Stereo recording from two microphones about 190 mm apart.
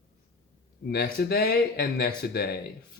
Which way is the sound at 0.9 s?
55° left (ahead or behind).